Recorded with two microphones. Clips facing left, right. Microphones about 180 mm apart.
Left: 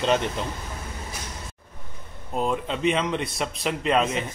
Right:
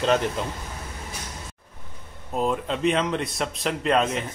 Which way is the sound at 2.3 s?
Centre (ahead or behind).